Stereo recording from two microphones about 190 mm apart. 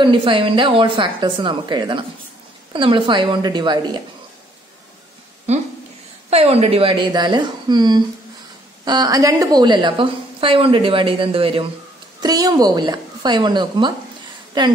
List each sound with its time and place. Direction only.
0.0 s a woman's voice: 25° right (ahead or behind)
6.3 s a woman's voice: 35° right (ahead or behind)